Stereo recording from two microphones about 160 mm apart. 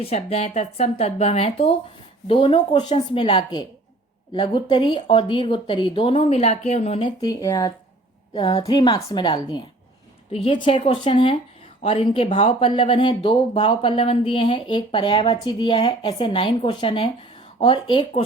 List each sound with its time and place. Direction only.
0.0 s speech: 40° left (ahead or behind)
7.2 s a woman's voice: 25° left (ahead or behind)
8.3 s a woman's voice: 35° left (ahead or behind)